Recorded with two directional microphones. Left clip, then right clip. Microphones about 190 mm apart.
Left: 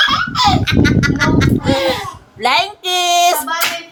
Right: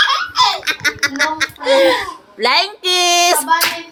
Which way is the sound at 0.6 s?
10° right (ahead or behind).